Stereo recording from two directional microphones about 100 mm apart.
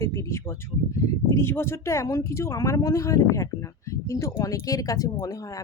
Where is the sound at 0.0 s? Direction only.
25° left (ahead or behind).